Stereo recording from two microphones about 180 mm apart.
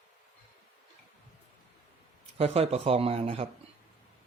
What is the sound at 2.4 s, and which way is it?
Speech, 35° right (ahead or behind).